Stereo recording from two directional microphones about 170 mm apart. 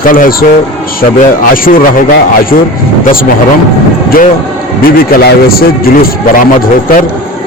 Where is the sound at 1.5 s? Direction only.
55° left (ahead or behind).